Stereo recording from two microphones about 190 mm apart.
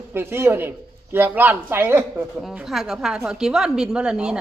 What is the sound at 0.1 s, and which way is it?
A man's voice, 10° right (ahead or behind).